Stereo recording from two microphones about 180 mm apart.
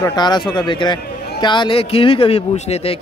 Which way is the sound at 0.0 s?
25° left (ahead or behind).